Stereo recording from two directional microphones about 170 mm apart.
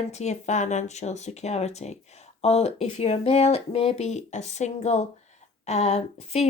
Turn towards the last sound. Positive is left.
turn(degrees=40)  # may be behind; listen again after turning